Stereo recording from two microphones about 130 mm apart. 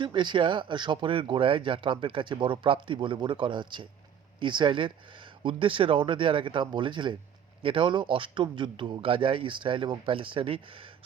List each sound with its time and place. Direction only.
0.0 s speech: 35° right (ahead or behind)